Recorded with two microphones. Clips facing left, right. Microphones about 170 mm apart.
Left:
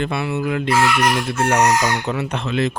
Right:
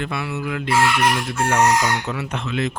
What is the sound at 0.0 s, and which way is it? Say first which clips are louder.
Chicken: left 4 dB; 25° left (ahead or behind).